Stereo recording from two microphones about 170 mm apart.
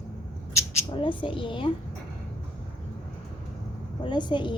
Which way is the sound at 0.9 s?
30° left (ahead or behind).